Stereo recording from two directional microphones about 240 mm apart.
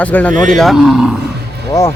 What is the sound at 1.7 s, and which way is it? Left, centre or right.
Speech, centre.